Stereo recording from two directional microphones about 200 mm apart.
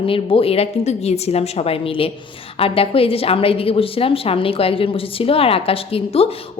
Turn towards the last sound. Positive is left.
turn(degrees=30)  # may be behind; listen again after turning